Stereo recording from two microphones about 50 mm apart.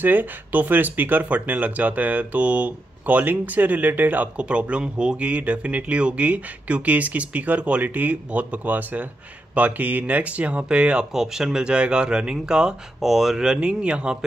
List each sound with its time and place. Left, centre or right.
0.0 s speech: right
11.1 s speech: centre